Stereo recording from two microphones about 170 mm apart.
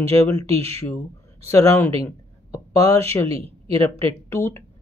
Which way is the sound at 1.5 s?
15° left (ahead or behind).